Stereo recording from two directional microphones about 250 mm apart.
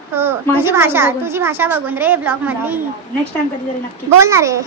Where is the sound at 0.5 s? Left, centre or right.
Centre.